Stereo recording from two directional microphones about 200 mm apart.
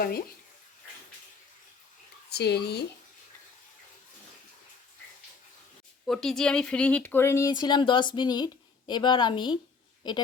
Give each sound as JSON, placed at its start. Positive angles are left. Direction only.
{"t": 0.0, "sound": "speech", "side_deg": 50}
{"t": 2.3, "sound": "speech", "side_deg": 55}
{"t": 6.1, "sound": "speech", "side_deg": 0}